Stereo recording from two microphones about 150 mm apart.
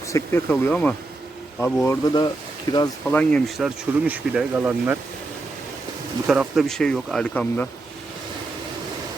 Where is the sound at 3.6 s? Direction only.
5° right (ahead or behind).